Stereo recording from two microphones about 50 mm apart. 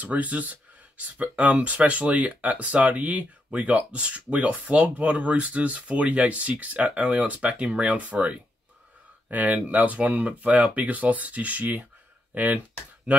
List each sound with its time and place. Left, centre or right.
0.0 s speech: right